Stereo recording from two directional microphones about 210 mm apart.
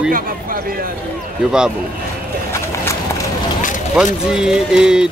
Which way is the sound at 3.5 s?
40° left (ahead or behind).